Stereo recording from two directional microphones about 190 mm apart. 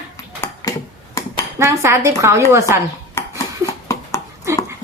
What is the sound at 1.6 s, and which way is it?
A woman's voice, 15° right (ahead or behind).